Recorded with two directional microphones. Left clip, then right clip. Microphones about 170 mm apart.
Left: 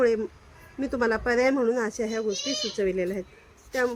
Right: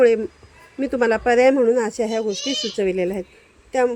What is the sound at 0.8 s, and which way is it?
Speech, 25° right (ahead or behind).